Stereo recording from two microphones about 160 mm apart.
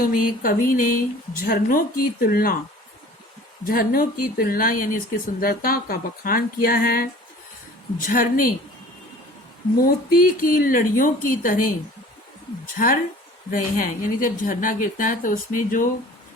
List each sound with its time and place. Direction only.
0.0 s a woman's voice: 60° left (ahead or behind)
3.6 s a woman's voice: 65° left (ahead or behind)
9.8 s a woman's voice: 65° left (ahead or behind)
12.7 s a woman's voice: 60° left (ahead or behind)